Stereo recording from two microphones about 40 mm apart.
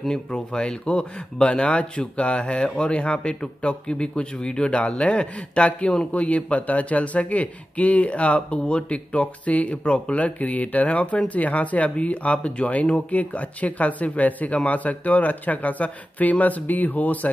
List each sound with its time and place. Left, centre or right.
0.3 s speech: left